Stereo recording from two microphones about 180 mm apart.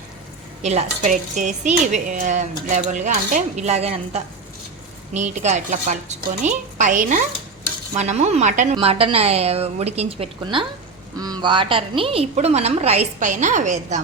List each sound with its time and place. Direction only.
0.6 s a woman's voice: 40° right (ahead or behind)